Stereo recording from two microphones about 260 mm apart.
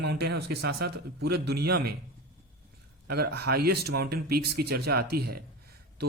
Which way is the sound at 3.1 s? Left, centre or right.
Right.